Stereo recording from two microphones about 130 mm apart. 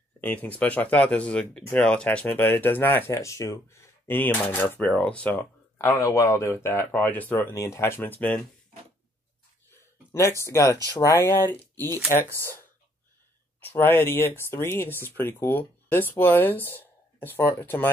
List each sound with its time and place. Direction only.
0.2 s speech: 10° left (ahead or behind)
10.1 s speech: 20° left (ahead or behind)
13.6 s speech: 15° left (ahead or behind)